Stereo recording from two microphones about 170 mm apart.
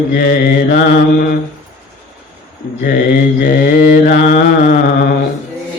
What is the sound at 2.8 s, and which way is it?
Mantra, 60° left (ahead or behind).